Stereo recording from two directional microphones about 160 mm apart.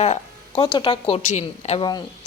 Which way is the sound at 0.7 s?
35° left (ahead or behind).